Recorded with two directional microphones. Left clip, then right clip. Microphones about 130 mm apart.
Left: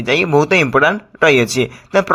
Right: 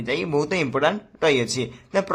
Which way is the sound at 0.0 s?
30° left (ahead or behind).